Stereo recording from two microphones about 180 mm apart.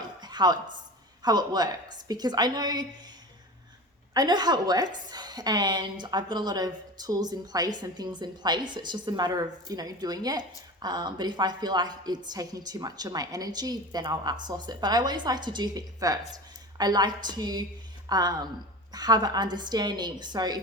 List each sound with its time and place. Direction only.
0.2 s a sound: 25° right (ahead or behind)
1.2 s a woman's voice: 20° right (ahead or behind)
4.1 s a woman's voice: 20° right (ahead or behind)